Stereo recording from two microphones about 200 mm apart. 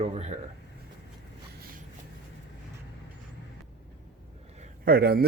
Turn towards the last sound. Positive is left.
turn(degrees=-50)  # may be behind; listen again after turning